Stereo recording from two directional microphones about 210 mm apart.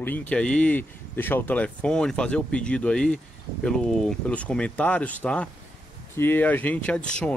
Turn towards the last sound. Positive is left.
turn(degrees=5)  # may be behind; listen again after turning